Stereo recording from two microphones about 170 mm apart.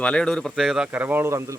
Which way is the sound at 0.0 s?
5° left (ahead or behind).